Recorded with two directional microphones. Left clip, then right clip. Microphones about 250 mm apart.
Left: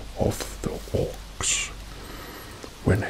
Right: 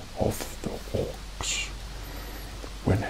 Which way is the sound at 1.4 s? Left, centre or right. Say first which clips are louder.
Left 4 dB; left.